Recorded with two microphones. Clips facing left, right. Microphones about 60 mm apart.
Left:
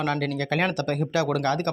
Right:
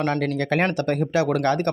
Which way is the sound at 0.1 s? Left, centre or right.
Right.